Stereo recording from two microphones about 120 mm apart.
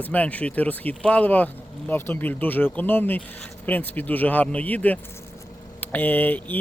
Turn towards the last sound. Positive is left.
turn(degrees=15)  # may be behind; listen again after turning